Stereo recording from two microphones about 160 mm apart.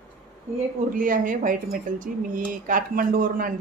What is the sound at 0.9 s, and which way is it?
Speech, 60° right (ahead or behind).